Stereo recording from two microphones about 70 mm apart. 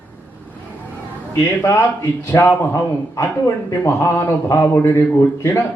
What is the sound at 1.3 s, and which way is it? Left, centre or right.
A man's voice, left.